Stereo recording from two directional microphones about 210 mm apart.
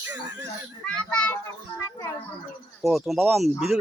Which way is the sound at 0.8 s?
5° left (ahead or behind).